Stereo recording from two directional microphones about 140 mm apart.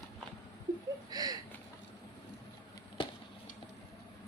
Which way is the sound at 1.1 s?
25° right (ahead or behind).